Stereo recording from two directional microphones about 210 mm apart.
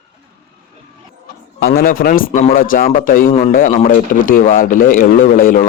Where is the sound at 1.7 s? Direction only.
45° left (ahead or behind).